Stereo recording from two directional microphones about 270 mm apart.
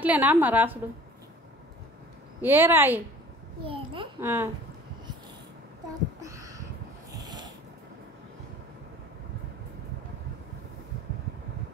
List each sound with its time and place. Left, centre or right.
0.0 s a woman's voice: centre
2.4 s a woman's voice: centre
3.6 s babbling: centre
6.2 s a sound: centre